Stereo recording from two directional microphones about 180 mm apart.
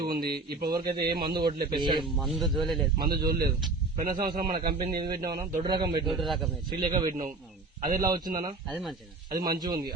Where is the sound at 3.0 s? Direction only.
55° right (ahead or behind).